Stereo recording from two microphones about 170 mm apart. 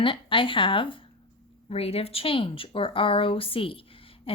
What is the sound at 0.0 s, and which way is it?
Speech, 30° left (ahead or behind).